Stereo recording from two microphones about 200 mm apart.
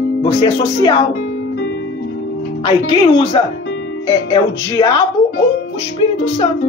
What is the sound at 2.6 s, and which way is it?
Speech, 25° left (ahead or behind).